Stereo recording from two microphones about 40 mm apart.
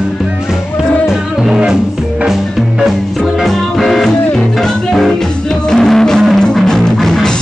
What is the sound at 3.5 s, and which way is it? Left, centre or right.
Music, centre.